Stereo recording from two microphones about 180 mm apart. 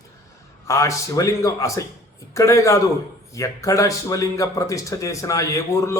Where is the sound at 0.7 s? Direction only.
15° left (ahead or behind).